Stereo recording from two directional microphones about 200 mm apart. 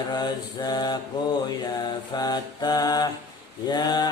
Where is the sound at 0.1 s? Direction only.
20° left (ahead or behind).